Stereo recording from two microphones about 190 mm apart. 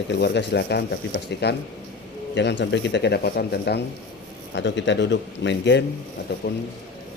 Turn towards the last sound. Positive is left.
turn(degrees=60)  # may be behind; listen again after turning